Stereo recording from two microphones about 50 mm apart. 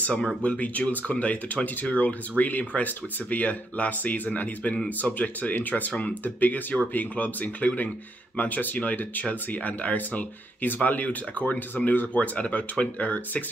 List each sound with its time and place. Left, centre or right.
0.0 s speech: left